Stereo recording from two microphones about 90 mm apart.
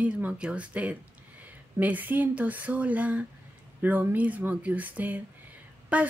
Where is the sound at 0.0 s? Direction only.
15° right (ahead or behind).